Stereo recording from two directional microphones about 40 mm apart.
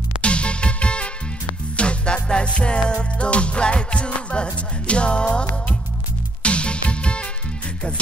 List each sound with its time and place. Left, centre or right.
0.2 s music: left